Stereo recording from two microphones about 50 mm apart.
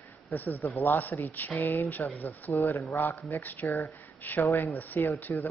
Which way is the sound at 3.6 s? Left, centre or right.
Left.